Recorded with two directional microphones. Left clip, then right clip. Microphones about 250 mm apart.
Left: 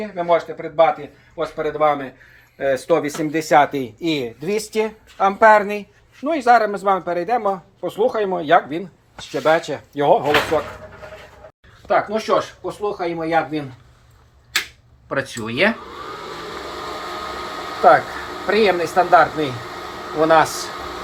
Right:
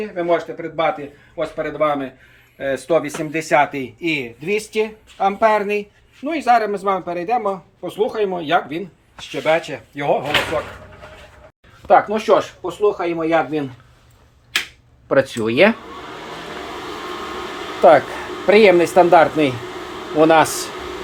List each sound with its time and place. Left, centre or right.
0.2 s speech: centre
2.6 s a man's voice: centre
11.9 s speech: centre
15.1 s speech: right
18.4 s speech: right